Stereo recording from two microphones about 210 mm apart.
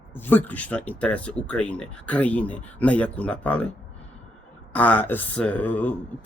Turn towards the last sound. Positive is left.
turn(degrees=10)  # may be behind; listen again after turning